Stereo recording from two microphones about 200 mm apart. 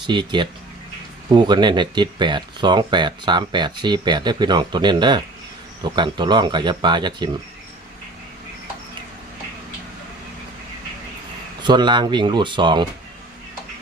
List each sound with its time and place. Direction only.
0.0 s speech: 20° right (ahead or behind)
11.6 s speech: 20° right (ahead or behind)